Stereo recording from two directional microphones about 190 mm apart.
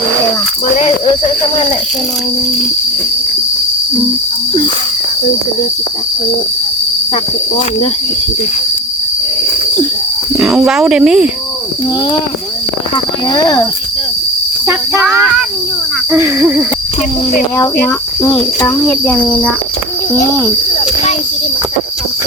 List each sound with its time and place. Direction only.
10.3 s speech: centre (ahead or behind)
13.3 s speech: 20° left (ahead or behind)
14.7 s speech: 5° right (ahead or behind)
17.8 s speech: 10° left (ahead or behind)